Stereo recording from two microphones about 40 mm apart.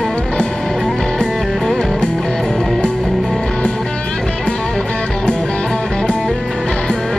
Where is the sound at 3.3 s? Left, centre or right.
Left.